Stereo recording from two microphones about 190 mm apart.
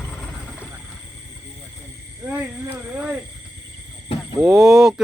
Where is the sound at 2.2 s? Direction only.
10° right (ahead or behind).